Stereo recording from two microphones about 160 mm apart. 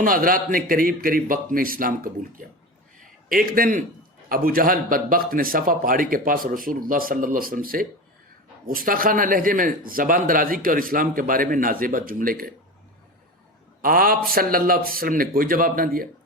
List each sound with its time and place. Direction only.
0.0 s a man's voice: 60° right (ahead or behind)
13.8 s speech: 65° right (ahead or behind)